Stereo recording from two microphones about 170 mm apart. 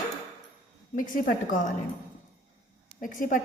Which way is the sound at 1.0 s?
55° left (ahead or behind).